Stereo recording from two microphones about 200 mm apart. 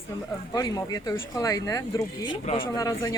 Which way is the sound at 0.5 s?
20° left (ahead or behind).